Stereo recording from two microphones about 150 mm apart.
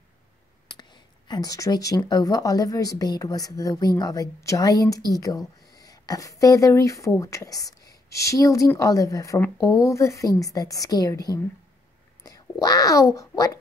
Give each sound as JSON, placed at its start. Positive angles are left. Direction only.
{"t": 0.7, "sound": "a woman's voice", "side_deg": 30}